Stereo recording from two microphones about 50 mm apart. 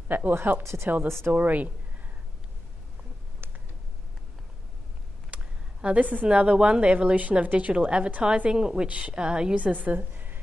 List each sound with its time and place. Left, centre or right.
0.1 s speech: right
3.4 s a sound: right
5.3 s a sound: right
5.9 s speech: right
6.2 s a woman's voice: right
9.6 s a woman's voice: right